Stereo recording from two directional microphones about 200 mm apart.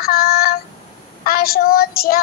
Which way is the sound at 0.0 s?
50° left (ahead or behind).